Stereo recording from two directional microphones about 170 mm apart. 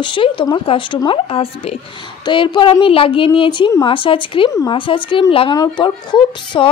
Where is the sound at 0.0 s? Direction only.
30° left (ahead or behind).